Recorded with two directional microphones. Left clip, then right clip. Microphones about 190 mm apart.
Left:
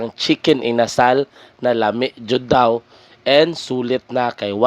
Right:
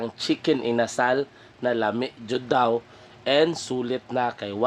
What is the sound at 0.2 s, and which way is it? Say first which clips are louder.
A man's voice: left 8 dB; 30° left (ahead or behind).